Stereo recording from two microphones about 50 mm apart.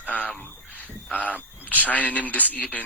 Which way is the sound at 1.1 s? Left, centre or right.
Left.